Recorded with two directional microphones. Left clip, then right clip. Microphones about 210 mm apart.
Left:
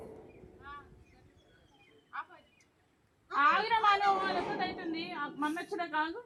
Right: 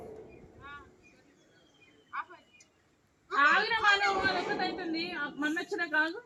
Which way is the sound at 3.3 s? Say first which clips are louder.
Right 2 dB; 10° right (ahead or behind).